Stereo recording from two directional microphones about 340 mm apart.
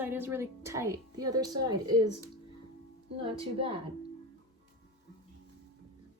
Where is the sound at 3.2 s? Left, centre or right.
Centre.